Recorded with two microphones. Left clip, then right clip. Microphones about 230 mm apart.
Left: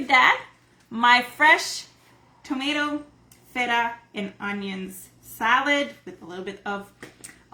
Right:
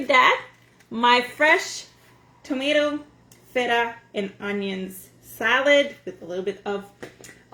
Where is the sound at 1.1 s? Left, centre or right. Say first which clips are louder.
Left 1 dB; centre.